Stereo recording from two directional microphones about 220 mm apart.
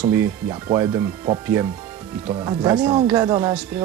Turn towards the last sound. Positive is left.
turn(degrees=-15)  # may be behind; listen again after turning